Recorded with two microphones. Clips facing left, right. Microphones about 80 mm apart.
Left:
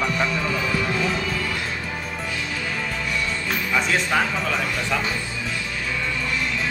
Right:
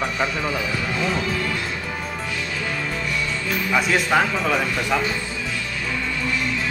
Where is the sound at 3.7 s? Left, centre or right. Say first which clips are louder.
Right 3 dB; centre.